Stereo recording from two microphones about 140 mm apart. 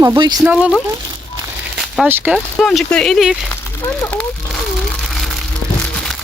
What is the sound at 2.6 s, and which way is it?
Speech, 5° left (ahead or behind).